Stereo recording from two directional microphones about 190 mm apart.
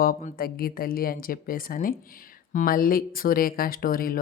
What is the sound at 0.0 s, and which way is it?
Speech, 50° left (ahead or behind).